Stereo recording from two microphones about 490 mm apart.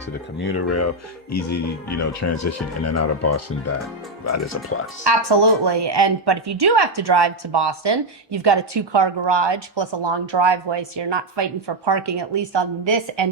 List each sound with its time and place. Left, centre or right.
0.3 s speech: left
5.0 s a woman's voice: right